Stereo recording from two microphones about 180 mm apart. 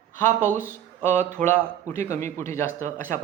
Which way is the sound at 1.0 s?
10° left (ahead or behind).